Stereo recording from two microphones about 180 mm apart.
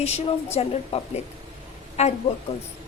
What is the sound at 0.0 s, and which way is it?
A woman's voice, 35° left (ahead or behind).